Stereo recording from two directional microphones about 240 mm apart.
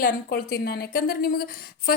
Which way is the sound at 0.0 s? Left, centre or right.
Left.